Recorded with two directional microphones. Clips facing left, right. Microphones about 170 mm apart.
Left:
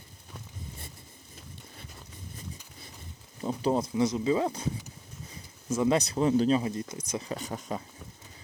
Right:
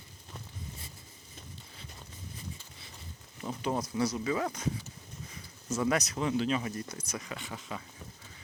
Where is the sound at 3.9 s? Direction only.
20° left (ahead or behind).